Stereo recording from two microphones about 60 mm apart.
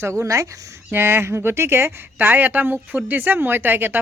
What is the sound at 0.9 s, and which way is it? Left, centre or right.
Speech, right.